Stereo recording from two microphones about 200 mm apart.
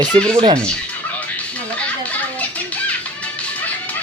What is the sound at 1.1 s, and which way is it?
Music, 5° left (ahead or behind).